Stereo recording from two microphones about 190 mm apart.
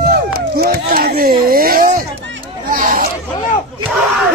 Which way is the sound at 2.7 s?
50° right (ahead or behind).